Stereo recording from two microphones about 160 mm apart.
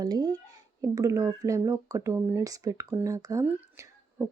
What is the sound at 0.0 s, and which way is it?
A woman's voice, 25° right (ahead or behind).